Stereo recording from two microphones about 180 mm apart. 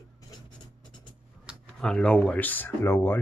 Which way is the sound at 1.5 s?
5° left (ahead or behind).